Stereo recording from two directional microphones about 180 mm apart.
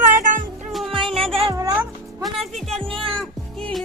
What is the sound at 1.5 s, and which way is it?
Music, 20° right (ahead or behind).